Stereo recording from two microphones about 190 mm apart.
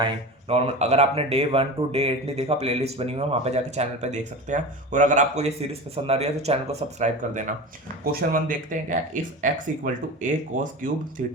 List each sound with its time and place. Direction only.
0.0 s speech: 30° right (ahead or behind)